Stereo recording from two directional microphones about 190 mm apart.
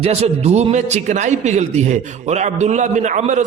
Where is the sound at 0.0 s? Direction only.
35° right (ahead or behind).